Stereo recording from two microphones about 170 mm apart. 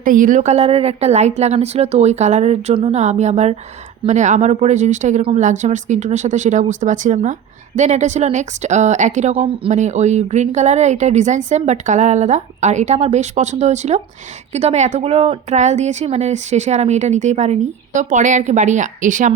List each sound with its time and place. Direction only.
0.0 s a woman's voice: 50° right (ahead or behind)